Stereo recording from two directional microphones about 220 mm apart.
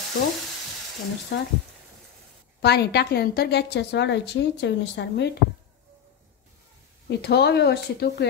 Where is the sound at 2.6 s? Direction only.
50° left (ahead or behind).